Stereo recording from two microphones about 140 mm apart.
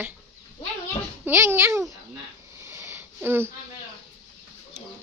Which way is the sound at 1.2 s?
15° right (ahead or behind).